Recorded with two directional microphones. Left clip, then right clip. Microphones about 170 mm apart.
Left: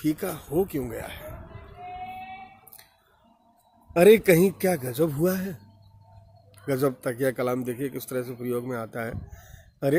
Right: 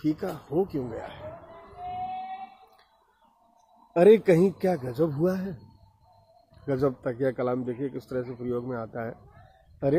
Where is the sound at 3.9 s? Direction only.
15° left (ahead or behind).